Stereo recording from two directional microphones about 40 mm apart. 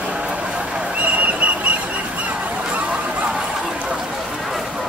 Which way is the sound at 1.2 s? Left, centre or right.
Right.